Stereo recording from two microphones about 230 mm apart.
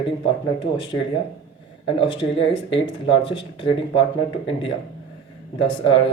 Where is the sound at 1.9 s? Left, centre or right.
Left.